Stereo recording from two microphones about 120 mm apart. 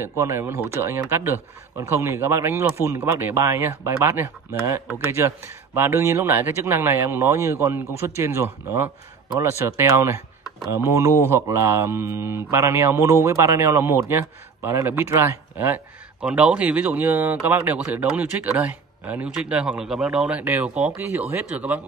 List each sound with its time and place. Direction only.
0.0 s speech: 20° right (ahead or behind)
11.3 s speech: 20° right (ahead or behind)